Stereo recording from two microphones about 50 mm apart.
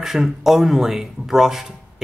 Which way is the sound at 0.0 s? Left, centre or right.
Centre.